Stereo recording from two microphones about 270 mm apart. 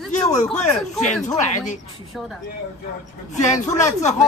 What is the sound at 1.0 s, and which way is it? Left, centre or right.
Speech, left.